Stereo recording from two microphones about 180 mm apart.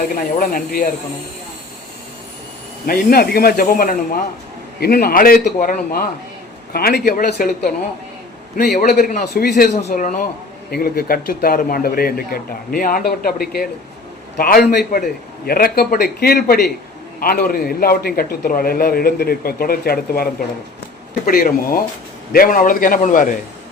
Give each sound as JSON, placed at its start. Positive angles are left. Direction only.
{"t": 0.1, "sound": "a man's voice", "side_deg": 50}
{"t": 2.8, "sound": "a man's voice", "side_deg": 55}
{"t": 8.5, "sound": "a man's voice", "side_deg": 45}
{"t": 9.7, "sound": "a man's voice", "side_deg": 45}
{"t": 10.7, "sound": "a man's voice", "side_deg": 55}
{"t": 21.2, "sound": "a man's voice", "side_deg": 50}